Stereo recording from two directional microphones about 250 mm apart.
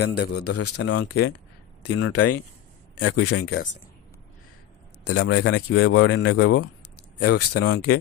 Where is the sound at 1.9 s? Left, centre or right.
Left.